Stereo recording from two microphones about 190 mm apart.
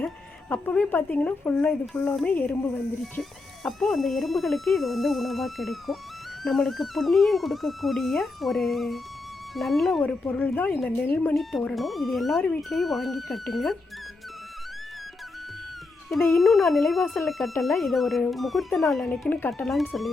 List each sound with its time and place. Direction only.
0.5 s speech: 5° left (ahead or behind)
16.4 s speech: centre (ahead or behind)